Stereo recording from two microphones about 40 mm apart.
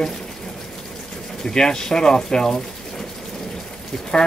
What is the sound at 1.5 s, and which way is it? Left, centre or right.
Speech, centre.